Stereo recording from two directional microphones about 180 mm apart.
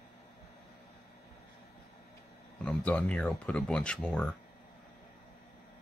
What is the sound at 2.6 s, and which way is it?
Speech, 5° left (ahead or behind).